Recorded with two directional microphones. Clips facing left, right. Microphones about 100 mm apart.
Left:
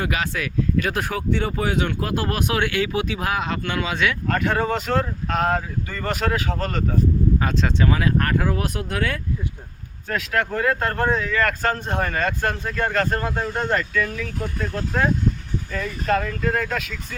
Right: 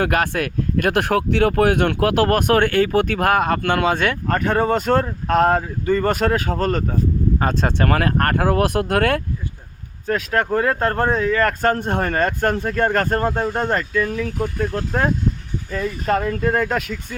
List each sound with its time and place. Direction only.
0.0 s speech: 55° right (ahead or behind)
4.3 s speech: 35° right (ahead or behind); by 9.2 s 60° right (ahead or behind)
10.1 s speech: 30° right (ahead or behind)
11.6 s speech: 50° right (ahead or behind)
13.9 s speech: 25° right (ahead or behind)
15.7 s speech: 35° right (ahead or behind)